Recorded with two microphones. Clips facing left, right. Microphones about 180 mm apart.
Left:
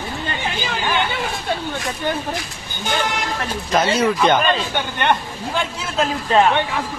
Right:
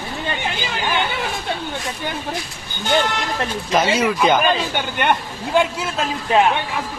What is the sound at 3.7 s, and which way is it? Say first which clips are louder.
Speech: left 1 dB; centre (ahead or behind).